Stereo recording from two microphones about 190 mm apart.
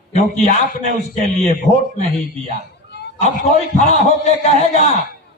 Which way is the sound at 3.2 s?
35° left (ahead or behind).